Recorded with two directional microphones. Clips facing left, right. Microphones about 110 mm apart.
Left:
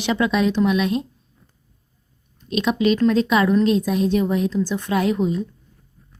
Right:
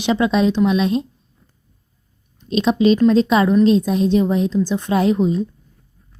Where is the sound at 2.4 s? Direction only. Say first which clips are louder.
Right 4 dB; 25° right (ahead or behind).